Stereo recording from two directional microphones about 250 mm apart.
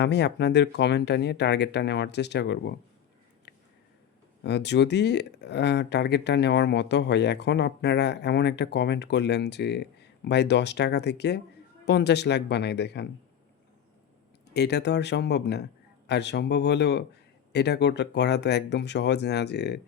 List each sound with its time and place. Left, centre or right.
0.0 s speech: left
4.4 s speech: left
14.5 s speech: left